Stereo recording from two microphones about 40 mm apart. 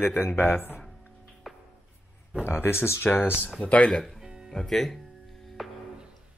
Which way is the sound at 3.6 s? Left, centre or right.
Left.